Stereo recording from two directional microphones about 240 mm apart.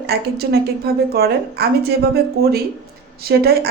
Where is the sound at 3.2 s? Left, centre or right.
Right.